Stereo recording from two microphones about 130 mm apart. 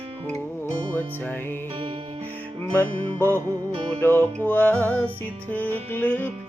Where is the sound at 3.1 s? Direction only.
20° left (ahead or behind).